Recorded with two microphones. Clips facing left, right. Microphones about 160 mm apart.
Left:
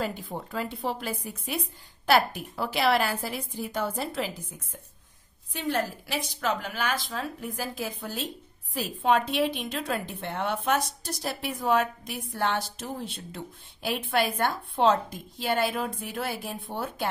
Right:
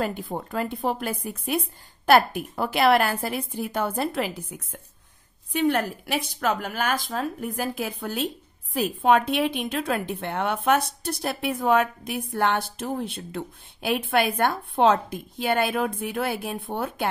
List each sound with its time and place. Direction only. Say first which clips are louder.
0.0 s a woman's voice: right 4 dB; 50° right (ahead or behind)